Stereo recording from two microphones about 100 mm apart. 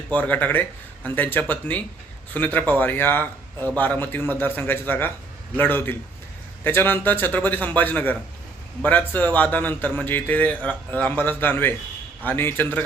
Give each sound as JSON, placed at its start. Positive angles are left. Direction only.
{"t": 0.1, "sound": "a man's voice", "side_deg": 15}